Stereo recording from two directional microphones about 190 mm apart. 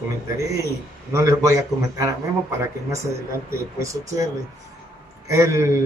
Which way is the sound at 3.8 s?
15° right (ahead or behind).